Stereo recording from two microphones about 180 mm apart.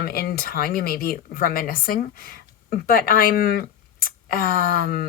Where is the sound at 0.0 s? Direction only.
60° left (ahead or behind).